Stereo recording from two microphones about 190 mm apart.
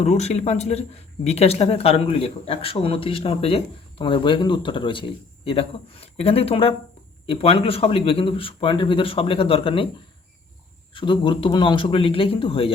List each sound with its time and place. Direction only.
0.0 s speech: 35° left (ahead or behind)
10.9 s speech: 25° left (ahead or behind)